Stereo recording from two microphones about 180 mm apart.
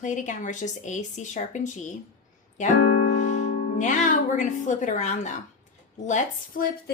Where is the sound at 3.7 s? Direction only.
45° left (ahead or behind).